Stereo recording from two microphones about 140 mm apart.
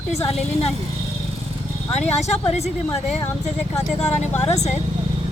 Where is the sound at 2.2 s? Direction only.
50° left (ahead or behind).